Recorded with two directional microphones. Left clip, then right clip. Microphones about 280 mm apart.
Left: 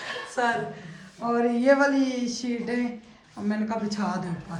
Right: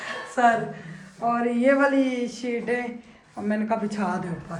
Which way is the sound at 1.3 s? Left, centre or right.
Centre.